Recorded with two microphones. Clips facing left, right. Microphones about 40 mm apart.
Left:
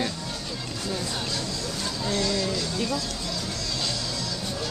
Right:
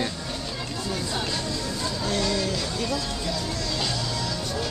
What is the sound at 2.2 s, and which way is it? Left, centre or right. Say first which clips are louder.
Speech: even; centre.